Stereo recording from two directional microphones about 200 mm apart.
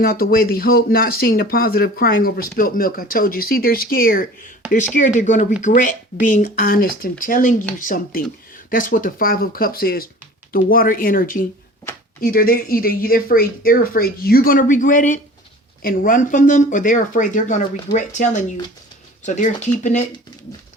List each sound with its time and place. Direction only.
0.0 s speech: 45° left (ahead or behind)